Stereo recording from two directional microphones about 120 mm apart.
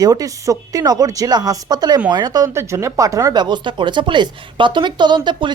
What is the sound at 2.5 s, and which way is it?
A woman's voice, 25° right (ahead or behind).